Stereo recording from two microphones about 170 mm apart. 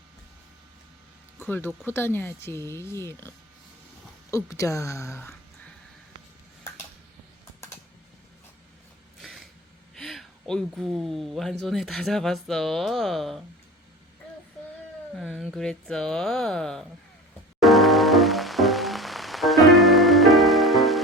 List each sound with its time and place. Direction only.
1.4 s speech: 15° left (ahead or behind)
9.2 s a sound: centre (ahead or behind)
9.9 s speech: centre (ahead or behind)
15.1 s speech: centre (ahead or behind)
17.6 s music: centre (ahead or behind)